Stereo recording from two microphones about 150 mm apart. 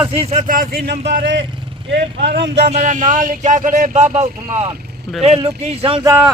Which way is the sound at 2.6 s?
50° right (ahead or behind).